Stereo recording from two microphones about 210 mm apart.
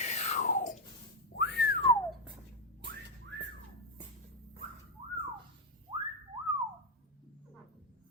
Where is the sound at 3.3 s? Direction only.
55° right (ahead or behind).